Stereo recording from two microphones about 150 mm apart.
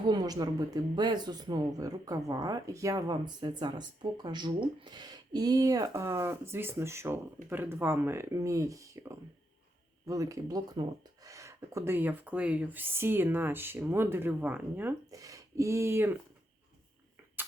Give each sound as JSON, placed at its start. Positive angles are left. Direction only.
{"t": 0.1, "sound": "speech", "side_deg": -25}